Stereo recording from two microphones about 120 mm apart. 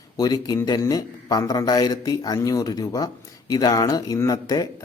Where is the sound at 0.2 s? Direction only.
35° left (ahead or behind).